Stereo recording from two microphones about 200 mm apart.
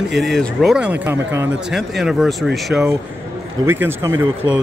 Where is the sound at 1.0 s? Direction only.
10° right (ahead or behind).